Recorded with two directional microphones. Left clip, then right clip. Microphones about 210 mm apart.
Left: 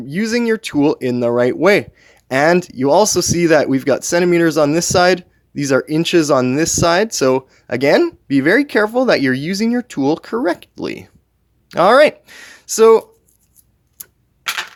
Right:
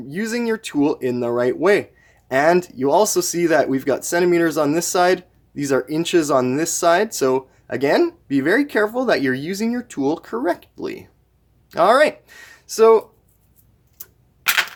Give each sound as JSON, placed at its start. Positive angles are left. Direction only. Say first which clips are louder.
{"t": 0.1, "sound": "speech", "louder": "left 5 dB", "side_deg": 35}
{"t": 14.0, "sound": "tick-tock", "louder": "left 5 dB", "side_deg": 45}